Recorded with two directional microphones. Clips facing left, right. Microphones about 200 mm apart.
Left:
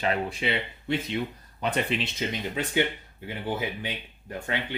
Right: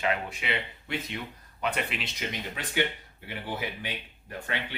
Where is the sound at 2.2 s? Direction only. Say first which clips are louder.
Left 2 dB; 25° left (ahead or behind).